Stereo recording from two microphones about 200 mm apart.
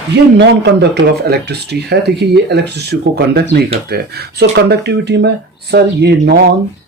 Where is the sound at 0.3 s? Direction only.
60° right (ahead or behind).